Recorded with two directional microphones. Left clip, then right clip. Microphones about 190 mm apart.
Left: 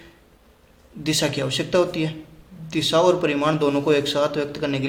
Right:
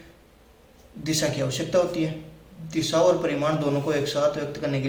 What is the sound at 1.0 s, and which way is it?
A man's voice, 40° left (ahead or behind).